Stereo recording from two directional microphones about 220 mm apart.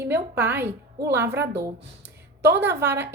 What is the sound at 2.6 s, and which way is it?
Speech, 10° right (ahead or behind).